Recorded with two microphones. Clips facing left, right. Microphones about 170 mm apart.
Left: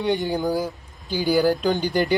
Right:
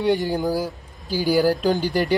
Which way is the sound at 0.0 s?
Centre (ahead or behind).